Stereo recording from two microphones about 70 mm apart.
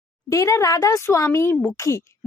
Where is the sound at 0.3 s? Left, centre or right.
Left.